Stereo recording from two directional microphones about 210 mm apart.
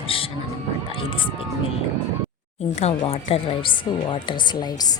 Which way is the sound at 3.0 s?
25° left (ahead or behind).